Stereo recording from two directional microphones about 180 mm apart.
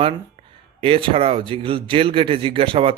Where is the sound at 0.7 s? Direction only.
30° right (ahead or behind).